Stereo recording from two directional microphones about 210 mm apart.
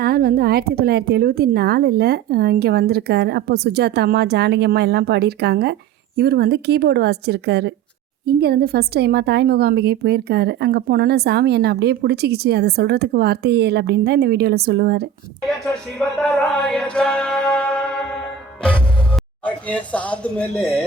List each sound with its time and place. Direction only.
0.0 s speech: 45° right (ahead or behind)
15.4 s music: 5° left (ahead or behind)
19.6 s speech: 5° left (ahead or behind)